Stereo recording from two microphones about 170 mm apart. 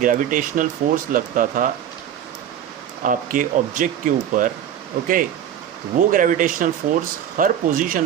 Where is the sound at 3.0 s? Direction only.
55° right (ahead or behind).